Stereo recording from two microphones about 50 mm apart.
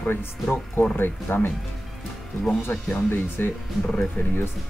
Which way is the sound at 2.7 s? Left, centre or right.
Left.